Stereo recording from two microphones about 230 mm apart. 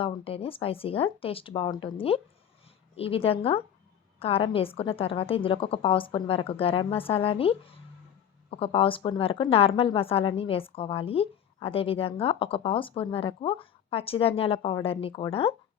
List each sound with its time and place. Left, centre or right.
0.0 s a woman's voice: left